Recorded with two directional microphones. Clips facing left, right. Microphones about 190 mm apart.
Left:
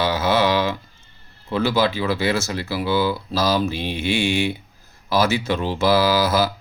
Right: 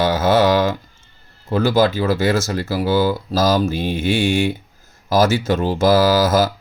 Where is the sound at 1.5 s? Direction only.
45° right (ahead or behind).